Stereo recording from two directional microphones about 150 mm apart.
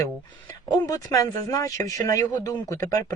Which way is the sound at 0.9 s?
25° left (ahead or behind).